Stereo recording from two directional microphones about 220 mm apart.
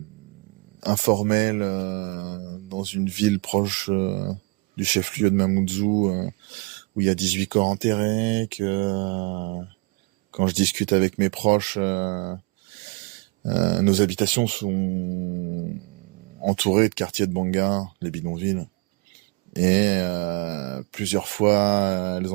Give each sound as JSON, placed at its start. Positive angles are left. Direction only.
{"t": 0.8, "sound": "speech", "side_deg": -35}
{"t": 13.5, "sound": "speech", "side_deg": -40}
{"t": 16.4, "sound": "speech", "side_deg": -35}